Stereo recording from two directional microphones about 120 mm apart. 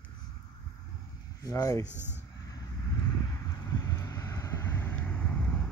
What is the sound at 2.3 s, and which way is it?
Vehicle, 30° left (ahead or behind).